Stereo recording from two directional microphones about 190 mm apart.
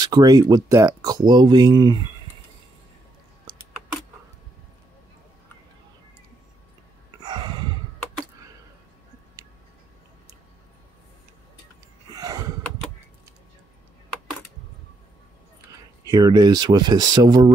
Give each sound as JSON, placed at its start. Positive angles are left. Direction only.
{"t": 0.0, "sound": "speech", "side_deg": -20}
{"t": 7.2, "sound": "gasp", "side_deg": -25}
{"t": 12.1, "sound": "gasp", "side_deg": -20}
{"t": 16.0, "sound": "speech", "side_deg": -20}